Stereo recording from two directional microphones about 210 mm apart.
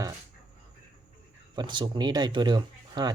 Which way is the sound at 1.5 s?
20° right (ahead or behind).